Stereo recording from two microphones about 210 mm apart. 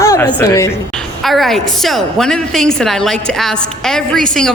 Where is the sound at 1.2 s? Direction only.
Centre (ahead or behind).